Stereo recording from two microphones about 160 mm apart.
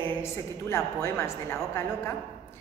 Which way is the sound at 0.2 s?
15° left (ahead or behind).